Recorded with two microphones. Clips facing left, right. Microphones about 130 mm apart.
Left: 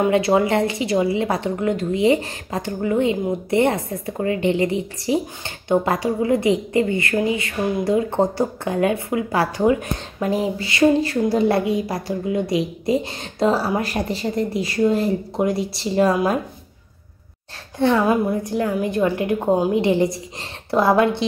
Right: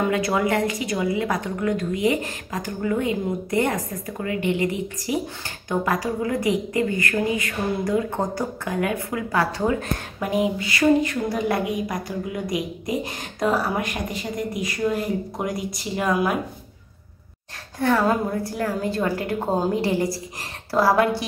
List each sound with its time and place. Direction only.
0.1 s a woman's voice: 25° left (ahead or behind)
10.3 s a woman's voice: 30° left (ahead or behind)
17.7 s a woman's voice: 20° left (ahead or behind)